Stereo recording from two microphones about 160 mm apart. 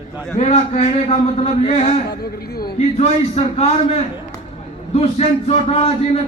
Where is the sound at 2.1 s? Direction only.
75° left (ahead or behind).